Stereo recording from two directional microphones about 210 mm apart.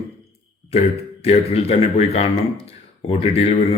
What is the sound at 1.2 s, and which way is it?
Speech, 30° left (ahead or behind).